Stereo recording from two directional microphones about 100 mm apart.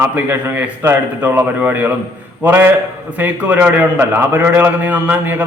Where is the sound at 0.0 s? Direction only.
20° right (ahead or behind).